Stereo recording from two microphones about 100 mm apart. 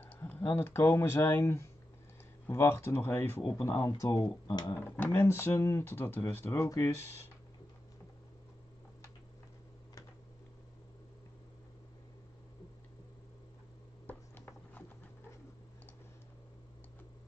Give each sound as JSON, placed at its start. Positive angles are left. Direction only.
{"t": 0.0, "sound": "speech", "side_deg": 15}
{"t": 4.7, "sound": "speech", "side_deg": 20}
{"t": 14.0, "sound": "a sound", "side_deg": 20}